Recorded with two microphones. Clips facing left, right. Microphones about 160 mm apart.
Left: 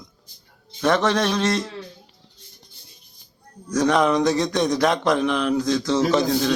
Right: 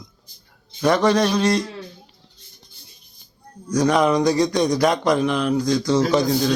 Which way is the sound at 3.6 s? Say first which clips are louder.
Right 1 dB; centre (ahead or behind).